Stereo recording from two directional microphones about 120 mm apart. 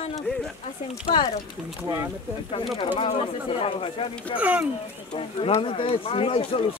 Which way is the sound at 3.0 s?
50° left (ahead or behind).